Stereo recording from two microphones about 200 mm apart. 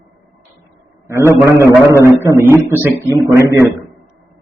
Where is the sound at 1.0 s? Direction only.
15° right (ahead or behind).